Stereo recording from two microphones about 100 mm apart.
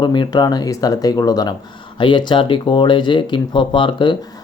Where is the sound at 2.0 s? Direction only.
50° left (ahead or behind).